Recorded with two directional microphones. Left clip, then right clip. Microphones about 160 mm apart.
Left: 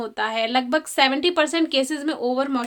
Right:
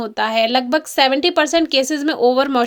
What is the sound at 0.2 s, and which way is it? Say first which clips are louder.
Speech: right 6 dB; 35° right (ahead or behind).